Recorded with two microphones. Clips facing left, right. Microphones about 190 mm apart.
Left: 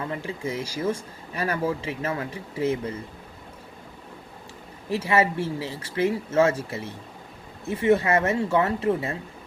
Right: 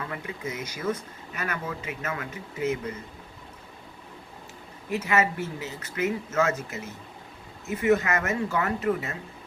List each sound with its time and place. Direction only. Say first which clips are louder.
0.0 s speech: left 4 dB; 30° left (ahead or behind)
4.9 s speech: left 3 dB; 30° left (ahead or behind)